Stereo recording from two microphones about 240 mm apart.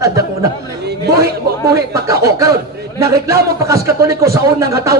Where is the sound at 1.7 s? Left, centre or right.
Centre.